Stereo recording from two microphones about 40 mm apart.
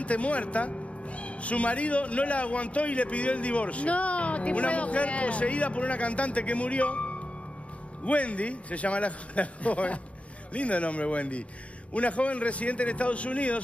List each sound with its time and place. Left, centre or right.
0.0 s speech: left